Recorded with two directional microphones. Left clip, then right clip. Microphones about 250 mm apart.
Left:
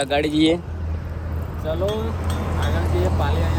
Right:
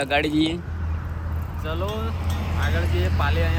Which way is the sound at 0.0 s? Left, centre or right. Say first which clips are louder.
Left 1 dB; centre.